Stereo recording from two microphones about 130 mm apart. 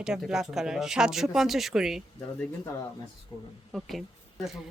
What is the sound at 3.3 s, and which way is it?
Speech, 30° left (ahead or behind).